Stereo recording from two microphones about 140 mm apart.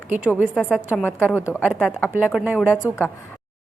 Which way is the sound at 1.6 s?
5° right (ahead or behind).